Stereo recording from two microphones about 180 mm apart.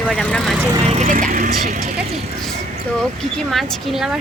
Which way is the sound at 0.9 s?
45° right (ahead or behind).